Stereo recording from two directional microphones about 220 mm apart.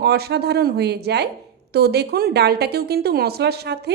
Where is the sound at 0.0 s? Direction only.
45° right (ahead or behind).